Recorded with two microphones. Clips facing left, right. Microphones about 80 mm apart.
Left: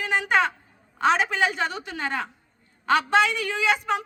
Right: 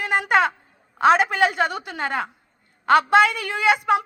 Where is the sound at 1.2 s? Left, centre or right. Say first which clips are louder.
Right 4 dB; right.